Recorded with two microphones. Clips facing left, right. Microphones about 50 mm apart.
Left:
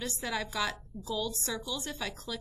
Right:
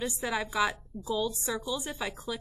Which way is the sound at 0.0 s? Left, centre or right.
Centre.